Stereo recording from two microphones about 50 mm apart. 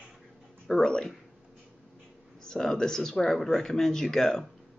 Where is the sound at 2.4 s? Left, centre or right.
Centre.